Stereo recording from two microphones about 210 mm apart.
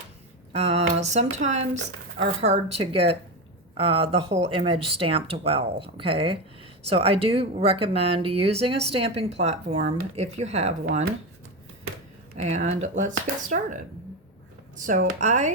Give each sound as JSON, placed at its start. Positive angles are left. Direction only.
{"t": 0.5, "sound": "speech", "side_deg": -30}
{"t": 12.4, "sound": "speech", "side_deg": -30}